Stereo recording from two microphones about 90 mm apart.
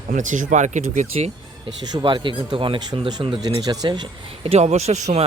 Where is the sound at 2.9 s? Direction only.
50° right (ahead or behind).